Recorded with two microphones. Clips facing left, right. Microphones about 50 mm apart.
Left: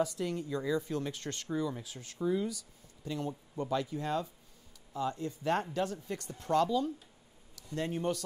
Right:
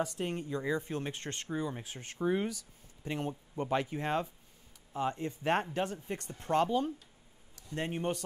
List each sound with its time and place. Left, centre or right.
0.0 s speech: right